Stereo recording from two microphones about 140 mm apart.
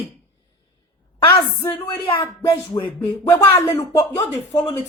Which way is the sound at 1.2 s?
15° left (ahead or behind).